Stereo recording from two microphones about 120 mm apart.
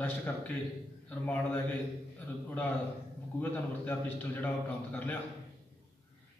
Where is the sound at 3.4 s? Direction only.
15° left (ahead or behind).